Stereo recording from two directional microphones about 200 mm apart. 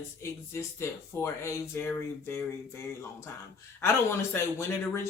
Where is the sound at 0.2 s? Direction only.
15° left (ahead or behind).